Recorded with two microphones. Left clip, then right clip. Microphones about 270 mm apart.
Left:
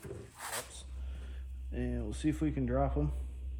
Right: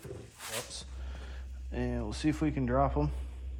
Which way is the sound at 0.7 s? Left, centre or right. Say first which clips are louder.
Right 8 dB; right.